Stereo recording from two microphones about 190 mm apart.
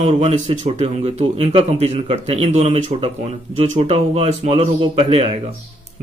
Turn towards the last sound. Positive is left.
turn(degrees=-30)  # may be behind; listen again after turning